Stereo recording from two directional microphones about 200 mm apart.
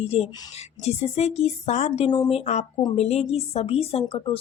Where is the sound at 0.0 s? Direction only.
30° left (ahead or behind).